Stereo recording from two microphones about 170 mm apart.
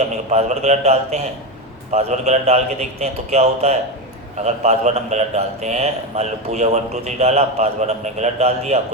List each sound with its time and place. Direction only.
0.3 s a man's voice: 40° right (ahead or behind)